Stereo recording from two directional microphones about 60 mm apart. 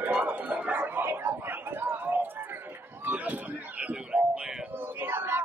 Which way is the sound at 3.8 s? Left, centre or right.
Centre.